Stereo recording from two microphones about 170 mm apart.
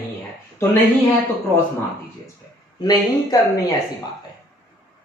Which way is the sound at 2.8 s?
20° left (ahead or behind).